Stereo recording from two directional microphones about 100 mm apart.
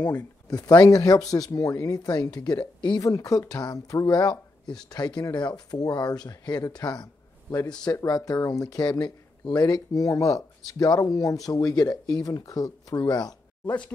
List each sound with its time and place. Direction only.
0.1 s speech: 15° left (ahead or behind)
0.6 s speech: 45° left (ahead or behind)
13.7 s speech: 15° left (ahead or behind)